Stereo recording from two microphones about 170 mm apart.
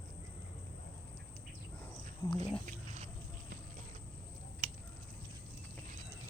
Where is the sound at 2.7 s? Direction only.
45° right (ahead or behind).